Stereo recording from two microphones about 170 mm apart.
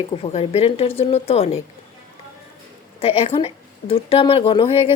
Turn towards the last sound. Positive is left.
turn(degrees=35)  # may be behind; listen again after turning